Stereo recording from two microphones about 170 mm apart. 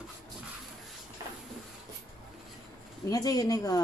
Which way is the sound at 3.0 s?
20° left (ahead or behind).